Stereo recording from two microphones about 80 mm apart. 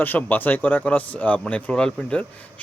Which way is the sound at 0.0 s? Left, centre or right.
Left.